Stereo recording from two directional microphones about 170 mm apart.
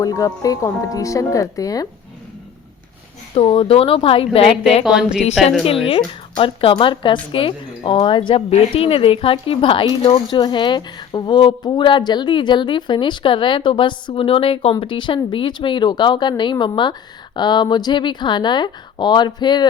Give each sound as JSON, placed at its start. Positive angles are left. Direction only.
{"t": 0.0, "sound": "speech", "side_deg": 20}
{"t": 3.3, "sound": "a woman's voice", "side_deg": 30}
{"t": 4.8, "sound": "a woman's voice", "side_deg": -5}
{"t": 6.3, "sound": "speech", "side_deg": 30}